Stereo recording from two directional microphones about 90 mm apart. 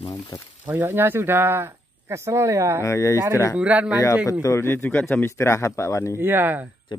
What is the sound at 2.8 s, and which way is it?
Speech, 35° left (ahead or behind).